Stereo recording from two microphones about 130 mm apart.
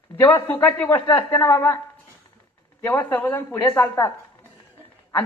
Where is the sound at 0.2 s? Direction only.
15° left (ahead or behind).